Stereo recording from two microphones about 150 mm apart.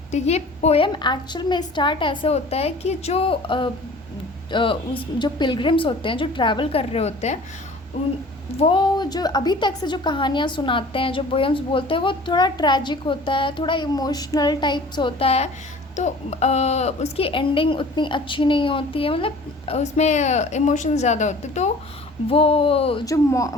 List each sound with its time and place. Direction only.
0.1 s speech: 50° left (ahead or behind)
0.9 s a woman's voice: 30° left (ahead or behind); by 7.3 s 45° left (ahead or behind)
8.5 s a woman's voice: 35° left (ahead or behind)
22.3 s a woman's voice: 40° left (ahead or behind)
23.0 s speech: 20° left (ahead or behind)